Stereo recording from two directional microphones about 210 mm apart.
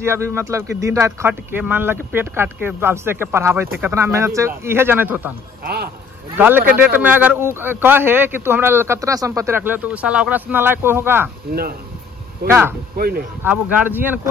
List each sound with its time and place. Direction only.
0.0 s speech: 10° right (ahead or behind)
6.3 s speech: 10° right (ahead or behind)
12.4 s speech: 10° right (ahead or behind)
12.9 s speech: 45° right (ahead or behind)
13.4 s speech: 10° right (ahead or behind)